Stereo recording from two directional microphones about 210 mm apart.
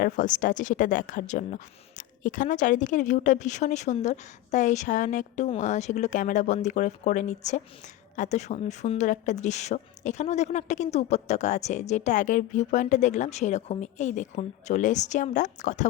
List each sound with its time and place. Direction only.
0.0 s speech: 35° left (ahead or behind)